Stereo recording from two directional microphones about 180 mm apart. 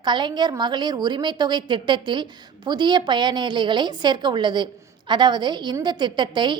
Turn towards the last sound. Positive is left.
turn(degrees=-25)  # may be behind; listen again after turning